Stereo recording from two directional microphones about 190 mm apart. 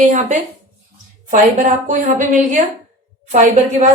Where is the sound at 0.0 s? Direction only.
40° right (ahead or behind).